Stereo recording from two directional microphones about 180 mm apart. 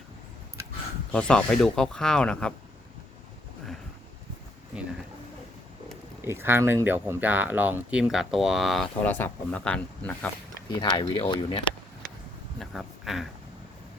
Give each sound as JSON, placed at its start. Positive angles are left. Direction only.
{"t": 1.1, "sound": "speech", "side_deg": 5}
{"t": 6.2, "sound": "speech", "side_deg": -15}
{"t": 10.8, "sound": "speech", "side_deg": 25}
{"t": 12.5, "sound": "a sound", "side_deg": 0}